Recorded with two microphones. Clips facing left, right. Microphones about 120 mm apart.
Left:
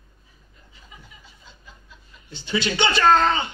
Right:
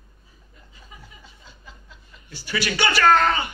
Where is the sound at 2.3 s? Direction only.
20° left (ahead or behind).